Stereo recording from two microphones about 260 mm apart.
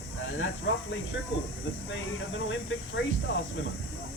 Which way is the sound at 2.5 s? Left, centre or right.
Left.